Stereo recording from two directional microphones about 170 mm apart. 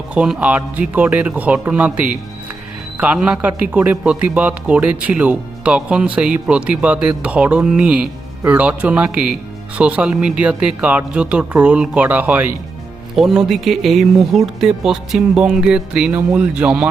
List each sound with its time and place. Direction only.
0.1 s a man's voice: 5° right (ahead or behind)